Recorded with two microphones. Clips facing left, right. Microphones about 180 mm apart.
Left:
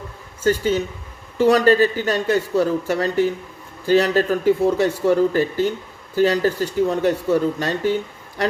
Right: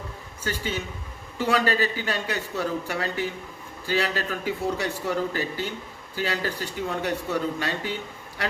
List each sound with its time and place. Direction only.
0.4 s a man's voice: 45° left (ahead or behind)